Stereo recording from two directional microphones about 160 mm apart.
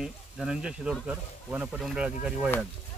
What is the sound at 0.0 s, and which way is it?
Speech, 5° right (ahead or behind).